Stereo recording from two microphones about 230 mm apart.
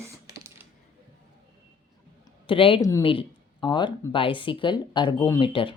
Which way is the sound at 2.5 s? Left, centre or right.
Left.